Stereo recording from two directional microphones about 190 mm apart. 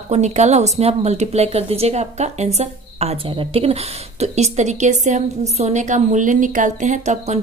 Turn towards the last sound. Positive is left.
turn(degrees=-35)  # may be behind; listen again after turning